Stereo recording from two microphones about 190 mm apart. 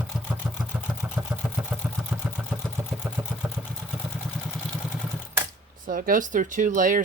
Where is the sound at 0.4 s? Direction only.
5° right (ahead or behind).